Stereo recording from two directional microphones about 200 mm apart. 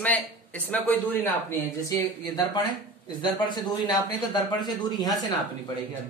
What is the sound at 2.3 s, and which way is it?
Speech, 20° left (ahead or behind).